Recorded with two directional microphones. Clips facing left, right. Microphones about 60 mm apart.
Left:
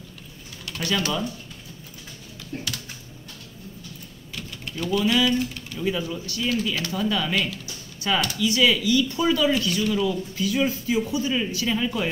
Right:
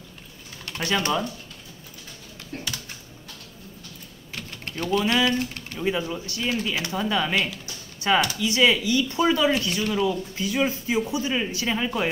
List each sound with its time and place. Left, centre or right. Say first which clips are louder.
0.7 s speech: right 1 dB; right
2.5 s speech: left 2 dB; right
4.3 s typing: even; right
5.0 s speech: left 3 dB; right
5.8 s speech: right 1 dB; right